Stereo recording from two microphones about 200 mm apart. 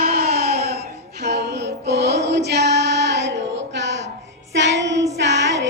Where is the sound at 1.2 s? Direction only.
55° right (ahead or behind).